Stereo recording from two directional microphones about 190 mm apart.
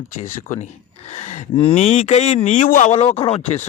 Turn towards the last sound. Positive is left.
turn(degrees=30)  # may be behind; listen again after turning